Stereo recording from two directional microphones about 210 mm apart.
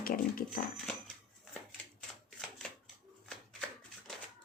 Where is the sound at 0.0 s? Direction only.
45° left (ahead or behind).